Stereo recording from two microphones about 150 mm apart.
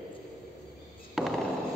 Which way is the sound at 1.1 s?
Centre (ahead or behind).